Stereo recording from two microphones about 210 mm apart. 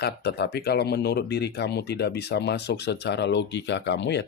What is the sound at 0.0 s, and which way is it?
Speech, 50° left (ahead or behind).